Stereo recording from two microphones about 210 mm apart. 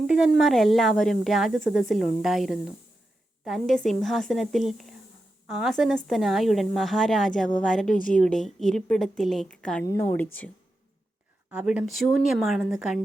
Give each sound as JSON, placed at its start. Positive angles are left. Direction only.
{"t": 0.1, "sound": "a woman's voice", "side_deg": 0}
{"t": 11.5, "sound": "speech", "side_deg": -5}